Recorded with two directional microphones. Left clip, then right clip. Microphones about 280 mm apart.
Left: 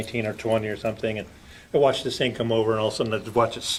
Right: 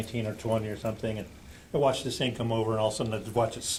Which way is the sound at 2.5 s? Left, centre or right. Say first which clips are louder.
Left 7 dB; left.